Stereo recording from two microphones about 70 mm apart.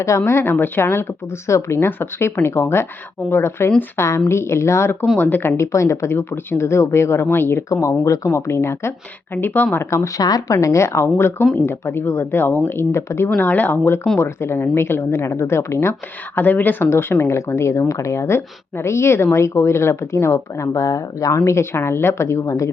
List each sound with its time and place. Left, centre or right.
0.3 s speech: left
5.5 s speech: left
9.3 s speech: left
9.7 s speech: left
10.2 s speech: left
13.4 s speech: left
16.4 s speech: left
21.3 s speech: left